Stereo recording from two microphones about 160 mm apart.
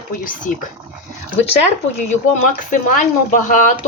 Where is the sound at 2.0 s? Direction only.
45° left (ahead or behind).